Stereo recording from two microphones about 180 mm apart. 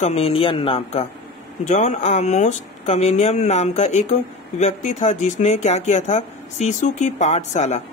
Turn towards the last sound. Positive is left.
turn(degrees=40)  # may be behind; listen again after turning